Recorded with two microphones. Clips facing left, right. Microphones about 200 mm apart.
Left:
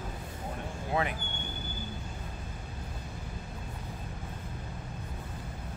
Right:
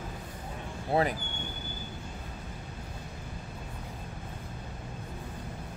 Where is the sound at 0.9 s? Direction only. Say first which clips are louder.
Right 4 dB; 35° right (ahead or behind).